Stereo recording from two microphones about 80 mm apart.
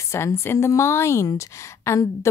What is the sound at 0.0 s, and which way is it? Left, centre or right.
Speech, left.